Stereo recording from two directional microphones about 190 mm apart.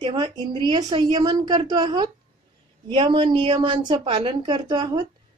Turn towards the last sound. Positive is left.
turn(degrees=-25)  # may be behind; listen again after turning